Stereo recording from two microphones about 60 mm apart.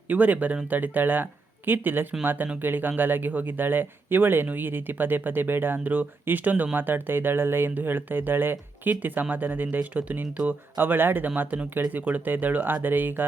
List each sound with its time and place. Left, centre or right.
0.1 s speech: right